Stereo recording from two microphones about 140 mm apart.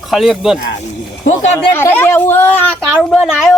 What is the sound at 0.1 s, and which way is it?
Speech, centre (ahead or behind).